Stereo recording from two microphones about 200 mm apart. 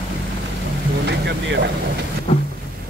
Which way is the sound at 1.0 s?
60° right (ahead or behind).